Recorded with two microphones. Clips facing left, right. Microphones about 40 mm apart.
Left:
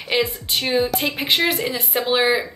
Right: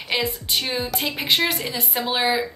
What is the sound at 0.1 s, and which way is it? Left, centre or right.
A woman's voice, centre.